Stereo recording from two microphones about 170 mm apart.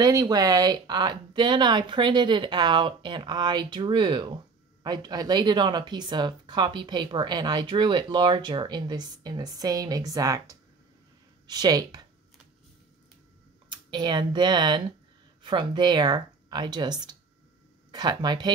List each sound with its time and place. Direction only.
0.0 s speech: 25° right (ahead or behind)
13.7 s speech: 25° right (ahead or behind)